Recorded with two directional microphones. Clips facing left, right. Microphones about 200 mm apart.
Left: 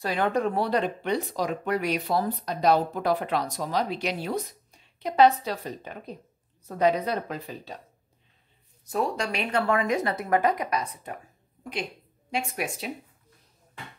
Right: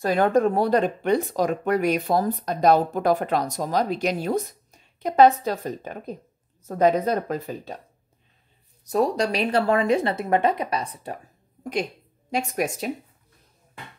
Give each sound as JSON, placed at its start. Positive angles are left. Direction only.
{"t": 0.0, "sound": "speech", "side_deg": -45}
{"t": 8.8, "sound": "a woman's voice", "side_deg": -40}
{"t": 12.3, "sound": "speech", "side_deg": -40}